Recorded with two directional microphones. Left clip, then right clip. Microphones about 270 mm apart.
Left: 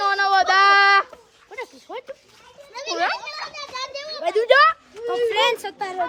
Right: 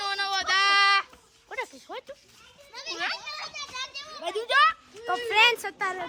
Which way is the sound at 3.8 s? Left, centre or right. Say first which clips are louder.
Left 8 dB; right.